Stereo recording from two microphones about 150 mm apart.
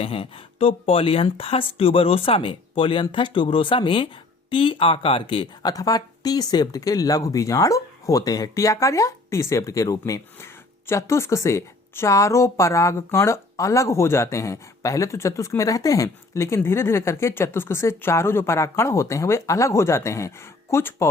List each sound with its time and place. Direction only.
0.0 s speech: 40° left (ahead or behind); by 21.1 s 15° left (ahead or behind)